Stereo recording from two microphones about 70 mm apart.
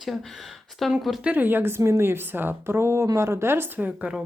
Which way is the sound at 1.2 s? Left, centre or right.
Right.